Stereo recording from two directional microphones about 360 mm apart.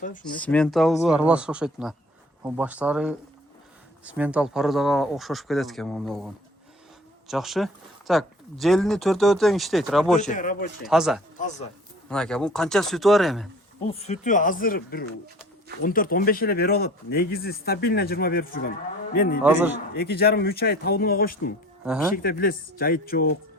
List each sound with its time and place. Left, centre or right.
0.0 s speech: left
0.3 s speech: centre
10.2 s speech: left
10.8 s speech: centre
11.3 s speech: centre
12.0 s speech: centre
13.8 s speech: centre
19.4 s speech: centre
19.9 s speech: left